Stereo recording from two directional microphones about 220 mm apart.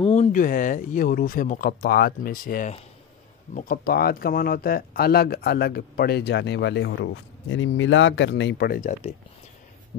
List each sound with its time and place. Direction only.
0.0 s speech: 30° left (ahead or behind)